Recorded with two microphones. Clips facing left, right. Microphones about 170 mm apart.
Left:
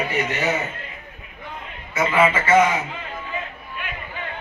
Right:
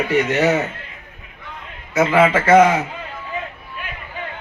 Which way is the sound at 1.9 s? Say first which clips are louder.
Right 4 dB; 70° right (ahead or behind).